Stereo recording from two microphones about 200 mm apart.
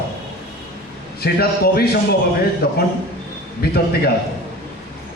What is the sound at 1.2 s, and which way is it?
A man's voice, 50° left (ahead or behind).